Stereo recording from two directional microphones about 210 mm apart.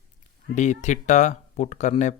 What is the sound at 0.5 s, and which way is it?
Speech, 35° left (ahead or behind).